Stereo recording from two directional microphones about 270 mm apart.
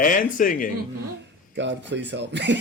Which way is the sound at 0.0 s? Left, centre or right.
Left.